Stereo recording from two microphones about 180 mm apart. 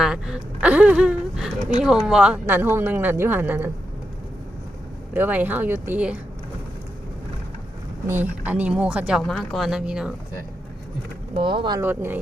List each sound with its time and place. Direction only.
0.0 s gasp: 5° right (ahead or behind)
2.0 s a woman's voice: 5° right (ahead or behind)
5.1 s a woman's voice: 10° right (ahead or behind)
8.0 s a woman's voice: 10° right (ahead or behind)
11.3 s speech: 30° right (ahead or behind)
11.8 s a woman's voice: 10° right (ahead or behind)